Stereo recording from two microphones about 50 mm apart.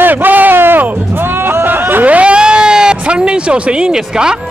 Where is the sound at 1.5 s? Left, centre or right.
Right.